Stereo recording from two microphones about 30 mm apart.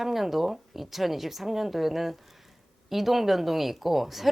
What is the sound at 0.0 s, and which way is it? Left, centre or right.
Speech, centre.